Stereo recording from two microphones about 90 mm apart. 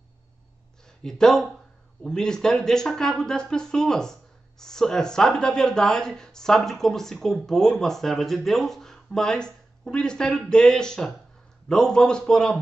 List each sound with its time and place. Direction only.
0.8 s speech: 5° left (ahead or behind)